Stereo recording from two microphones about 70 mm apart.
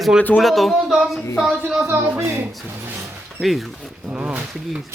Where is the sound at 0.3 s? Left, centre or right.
Centre.